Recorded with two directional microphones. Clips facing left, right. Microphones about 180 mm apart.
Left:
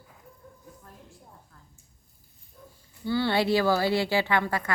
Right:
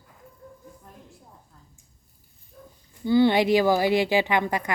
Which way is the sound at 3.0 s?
15° right (ahead or behind).